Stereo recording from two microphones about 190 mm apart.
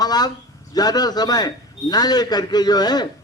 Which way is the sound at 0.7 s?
20° left (ahead or behind).